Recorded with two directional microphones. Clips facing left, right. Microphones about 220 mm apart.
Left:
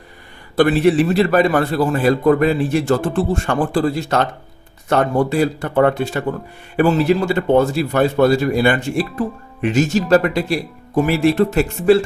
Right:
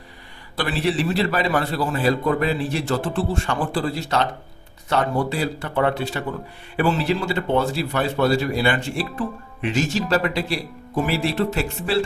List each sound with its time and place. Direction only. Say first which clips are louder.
0.5 s speech: left 9 dB; 50° left (ahead or behind)